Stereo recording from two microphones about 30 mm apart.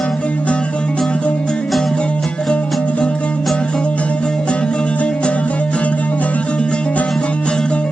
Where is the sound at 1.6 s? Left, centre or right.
Centre.